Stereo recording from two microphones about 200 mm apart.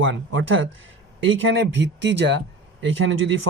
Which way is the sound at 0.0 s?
70° right (ahead or behind).